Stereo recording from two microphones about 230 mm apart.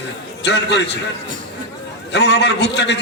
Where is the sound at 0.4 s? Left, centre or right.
Left.